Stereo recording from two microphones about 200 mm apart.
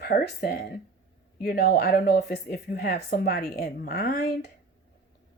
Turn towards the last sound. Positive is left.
turn(degrees=50)  # may be behind; listen again after turning